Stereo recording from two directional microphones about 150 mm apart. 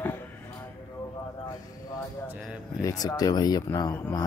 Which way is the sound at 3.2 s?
25° left (ahead or behind).